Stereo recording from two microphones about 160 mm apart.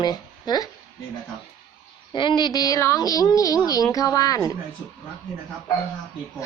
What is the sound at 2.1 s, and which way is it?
Speech, 30° left (ahead or behind).